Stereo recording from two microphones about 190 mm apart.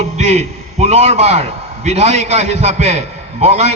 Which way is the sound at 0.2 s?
35° right (ahead or behind).